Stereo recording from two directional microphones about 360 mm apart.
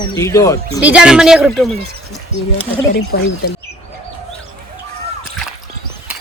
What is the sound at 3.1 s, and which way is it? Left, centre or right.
Speech, left.